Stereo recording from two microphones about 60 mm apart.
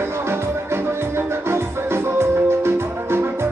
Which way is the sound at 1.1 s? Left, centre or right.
Right.